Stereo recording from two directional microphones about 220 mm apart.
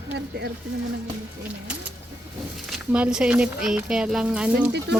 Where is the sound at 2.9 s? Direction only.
5° right (ahead or behind).